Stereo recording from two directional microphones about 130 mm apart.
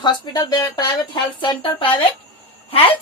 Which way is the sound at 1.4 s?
40° left (ahead or behind).